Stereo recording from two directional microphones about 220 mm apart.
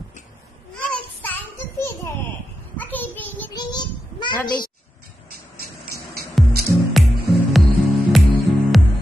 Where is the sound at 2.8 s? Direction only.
10° left (ahead or behind).